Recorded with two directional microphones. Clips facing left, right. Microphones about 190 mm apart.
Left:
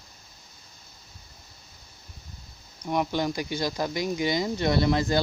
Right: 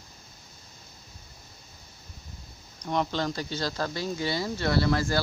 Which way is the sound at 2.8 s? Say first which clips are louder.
Left 2 dB; 10° left (ahead or behind).